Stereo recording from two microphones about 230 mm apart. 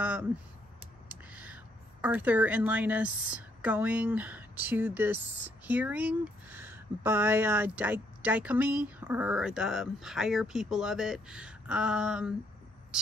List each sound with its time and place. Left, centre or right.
0.0 s a sound: centre
1.0 s speech: centre
12.9 s cricket: centre